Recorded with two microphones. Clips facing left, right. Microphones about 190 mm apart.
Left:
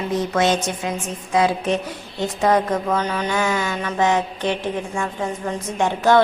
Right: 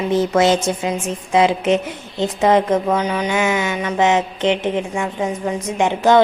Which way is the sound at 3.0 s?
10° right (ahead or behind).